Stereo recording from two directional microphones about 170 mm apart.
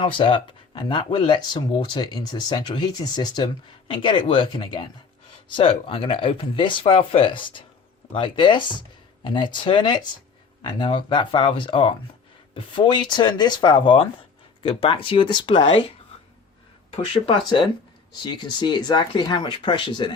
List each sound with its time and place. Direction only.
0.0 s speech: 30° left (ahead or behind)
16.9 s speech: 30° left (ahead or behind)